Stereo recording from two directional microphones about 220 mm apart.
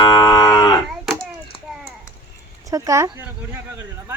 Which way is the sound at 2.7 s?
15° right (ahead or behind).